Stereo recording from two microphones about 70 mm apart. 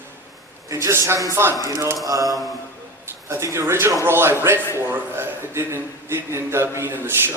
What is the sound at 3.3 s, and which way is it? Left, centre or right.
A man's voice, right.